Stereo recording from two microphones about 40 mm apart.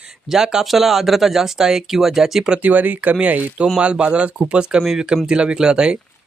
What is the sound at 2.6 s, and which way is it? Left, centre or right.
Speech, right.